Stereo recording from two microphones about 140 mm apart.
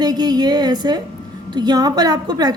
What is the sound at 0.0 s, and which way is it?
A woman's voice, 30° right (ahead or behind).